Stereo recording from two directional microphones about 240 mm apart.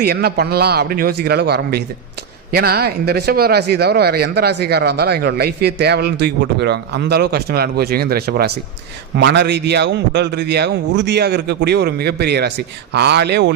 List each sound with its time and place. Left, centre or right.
0.0 s a man's voice: right